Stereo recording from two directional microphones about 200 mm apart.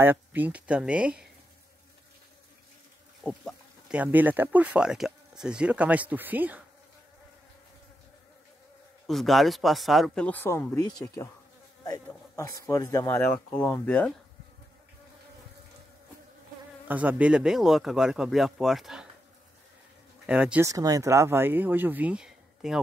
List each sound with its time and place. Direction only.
0.0 s speech: 10° right (ahead or behind)
3.2 s speech: 5° left (ahead or behind)
3.9 s speech: 10° right (ahead or behind)
9.0 s speech: centre (ahead or behind)
12.1 s a sound: 15° left (ahead or behind)
12.6 s speech: 15° left (ahead or behind)
16.8 s speech: 10° right (ahead or behind)
20.2 s speech: 5° right (ahead or behind)